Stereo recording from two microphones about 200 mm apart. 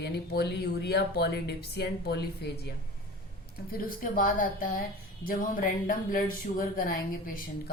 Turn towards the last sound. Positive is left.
turn(degrees=45)  # may be behind; listen again after turning